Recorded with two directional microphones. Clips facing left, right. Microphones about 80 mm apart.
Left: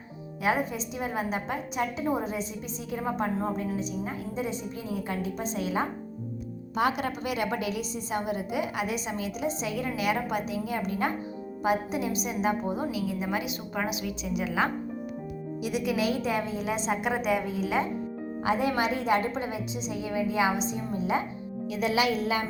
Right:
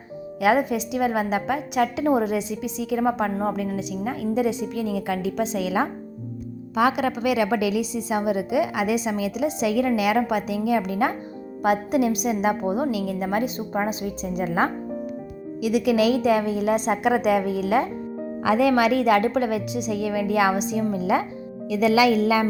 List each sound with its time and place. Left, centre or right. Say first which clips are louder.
0.3 s a woman's voice: right 8 dB; right
11.6 s a woman's voice: right 7 dB; right
13.7 s a woman's voice: right 5 dB; right
15.6 s a woman's voice: right 8 dB; right
18.4 s a woman's voice: right 8 dB; right